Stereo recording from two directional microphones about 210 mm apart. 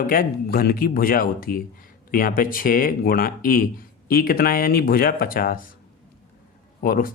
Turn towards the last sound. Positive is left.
turn(degrees=40)  # may be behind; listen again after turning